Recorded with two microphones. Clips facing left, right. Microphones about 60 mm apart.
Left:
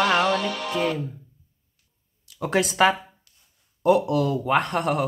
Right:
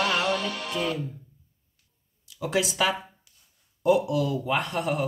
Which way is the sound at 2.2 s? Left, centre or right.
Left.